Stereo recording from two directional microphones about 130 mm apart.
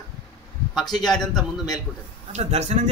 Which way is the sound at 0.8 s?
30° left (ahead or behind).